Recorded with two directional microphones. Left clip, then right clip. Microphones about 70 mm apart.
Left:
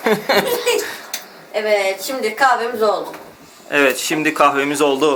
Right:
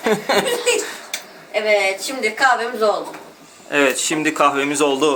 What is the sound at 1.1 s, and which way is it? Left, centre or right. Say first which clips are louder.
A woman's voice: right 2 dB; right.